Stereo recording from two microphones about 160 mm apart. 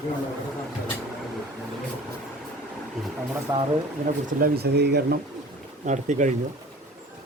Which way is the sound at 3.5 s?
25° right (ahead or behind).